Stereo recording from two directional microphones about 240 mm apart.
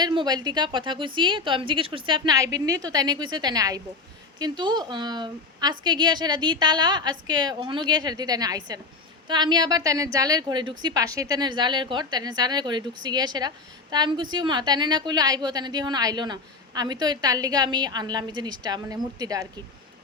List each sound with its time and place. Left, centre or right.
0.0 s a woman's voice: centre